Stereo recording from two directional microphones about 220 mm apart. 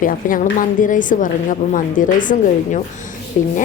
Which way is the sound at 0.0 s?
40° left (ahead or behind).